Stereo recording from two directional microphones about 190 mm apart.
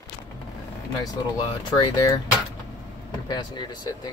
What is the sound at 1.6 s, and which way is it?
Speech, 20° left (ahead or behind).